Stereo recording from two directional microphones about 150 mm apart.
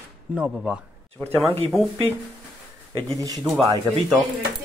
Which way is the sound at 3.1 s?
25° right (ahead or behind).